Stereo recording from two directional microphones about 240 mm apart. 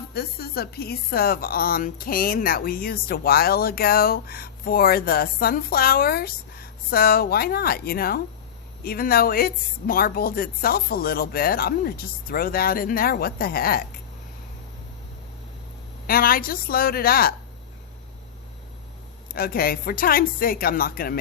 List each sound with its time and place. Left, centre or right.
0.1 s speech: left
16.0 s speech: left
19.3 s speech: left